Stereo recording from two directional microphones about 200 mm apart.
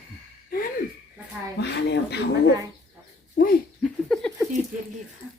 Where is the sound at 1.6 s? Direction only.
55° left (ahead or behind).